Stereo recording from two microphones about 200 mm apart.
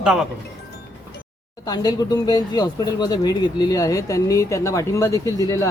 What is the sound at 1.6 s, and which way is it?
Speech, 20° left (ahead or behind).